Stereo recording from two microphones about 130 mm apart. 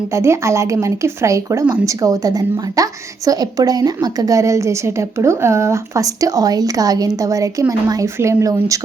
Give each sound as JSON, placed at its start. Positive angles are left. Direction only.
{"t": 0.1, "sound": "a woman's voice", "side_deg": -20}